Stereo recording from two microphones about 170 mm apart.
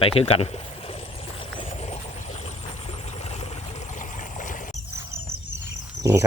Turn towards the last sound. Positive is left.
turn(degrees=-15)  # may be behind; listen again after turning